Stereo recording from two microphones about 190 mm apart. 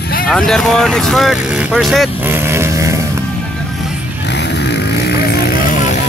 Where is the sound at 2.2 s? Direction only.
15° right (ahead or behind).